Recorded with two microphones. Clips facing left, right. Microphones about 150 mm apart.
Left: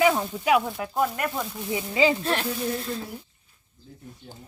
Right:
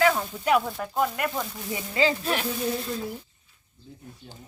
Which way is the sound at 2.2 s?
Centre (ahead or behind).